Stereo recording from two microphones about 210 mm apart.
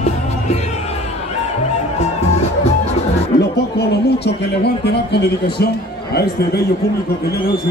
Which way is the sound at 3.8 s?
50° left (ahead or behind).